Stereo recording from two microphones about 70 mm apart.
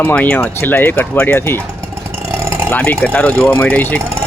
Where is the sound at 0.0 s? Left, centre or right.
Left.